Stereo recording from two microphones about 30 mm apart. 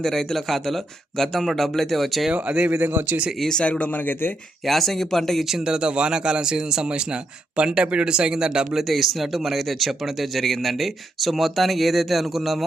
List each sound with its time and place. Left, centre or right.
0.0 s speech: centre
2.3 s speech: right
2.6 s a man's voice: right
3.6 s speech: left
4.6 s speech: centre
5.6 s a man's voice: right
8.9 s speech: centre